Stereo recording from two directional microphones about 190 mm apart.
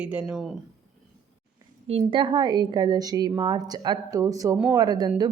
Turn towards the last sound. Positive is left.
turn(degrees=-20)  # may be behind; listen again after turning